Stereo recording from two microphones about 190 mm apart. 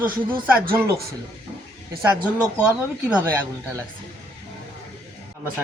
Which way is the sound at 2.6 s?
5° right (ahead or behind).